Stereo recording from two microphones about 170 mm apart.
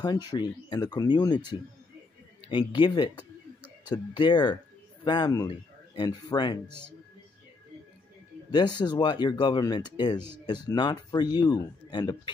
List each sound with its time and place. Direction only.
0.0 s speech: 25° left (ahead or behind)
8.5 s speech: 25° left (ahead or behind)